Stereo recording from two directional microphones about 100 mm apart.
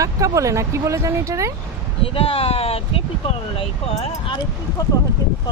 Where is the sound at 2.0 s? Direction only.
70° left (ahead or behind).